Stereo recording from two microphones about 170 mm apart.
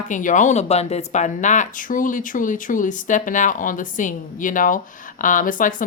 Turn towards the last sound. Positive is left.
turn(degrees=50)  # may be behind; listen again after turning